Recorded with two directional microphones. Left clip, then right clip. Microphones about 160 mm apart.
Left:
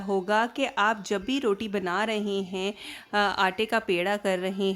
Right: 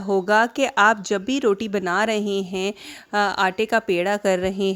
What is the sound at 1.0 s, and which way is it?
Speech, 25° right (ahead or behind).